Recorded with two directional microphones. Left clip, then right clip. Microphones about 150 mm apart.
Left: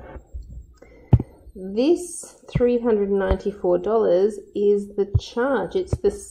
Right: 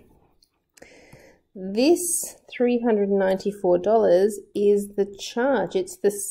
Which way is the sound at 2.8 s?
20° right (ahead or behind).